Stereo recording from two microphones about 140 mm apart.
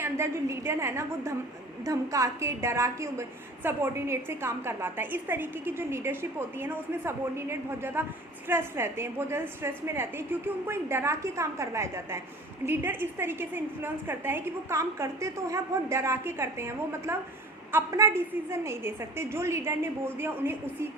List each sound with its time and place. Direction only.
0.0 s a woman's voice: 20° right (ahead or behind)